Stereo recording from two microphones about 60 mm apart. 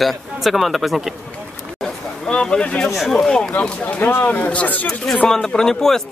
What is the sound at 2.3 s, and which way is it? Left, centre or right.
Speech, centre.